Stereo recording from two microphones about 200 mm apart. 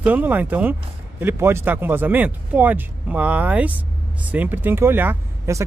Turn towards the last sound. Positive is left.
turn(degrees=-10)  # may be behind; listen again after turning